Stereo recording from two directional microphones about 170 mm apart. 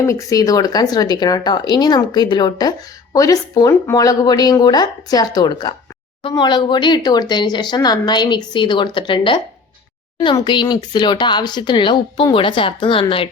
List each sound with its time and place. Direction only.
0.0 s speech: 20° left (ahead or behind)